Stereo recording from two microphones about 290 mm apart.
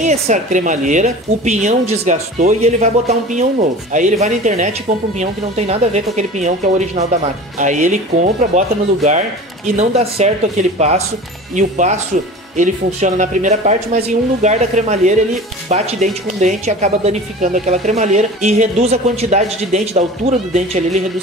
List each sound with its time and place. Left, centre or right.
0.0 s speech: right
11.5 s speech: right